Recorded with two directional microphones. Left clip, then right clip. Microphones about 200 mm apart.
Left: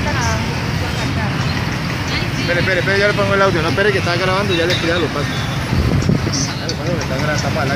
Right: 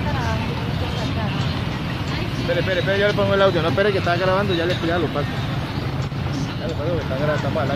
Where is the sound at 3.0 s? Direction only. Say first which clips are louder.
Left 1 dB; 50° right (ahead or behind).